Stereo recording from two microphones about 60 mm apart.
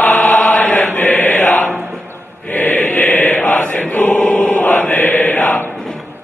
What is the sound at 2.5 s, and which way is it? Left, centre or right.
Chant, left.